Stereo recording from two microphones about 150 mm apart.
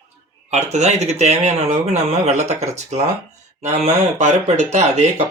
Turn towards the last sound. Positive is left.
turn(degrees=-50)  # may be behind; listen again after turning